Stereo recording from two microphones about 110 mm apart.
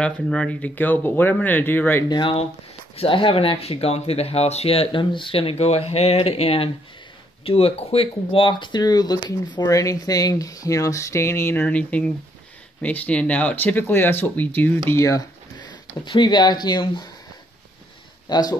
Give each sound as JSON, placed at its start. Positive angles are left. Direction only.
{"t": 0.0, "sound": "speech", "side_deg": 10}
{"t": 2.0, "sound": "speech", "side_deg": 45}
{"t": 14.9, "sound": "speech", "side_deg": 30}
{"t": 16.1, "sound": "speech", "side_deg": 45}
{"t": 18.3, "sound": "speech", "side_deg": 35}